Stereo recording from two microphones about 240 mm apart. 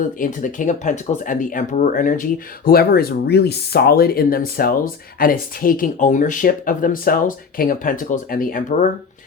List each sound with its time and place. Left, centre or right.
0.2 s speech: left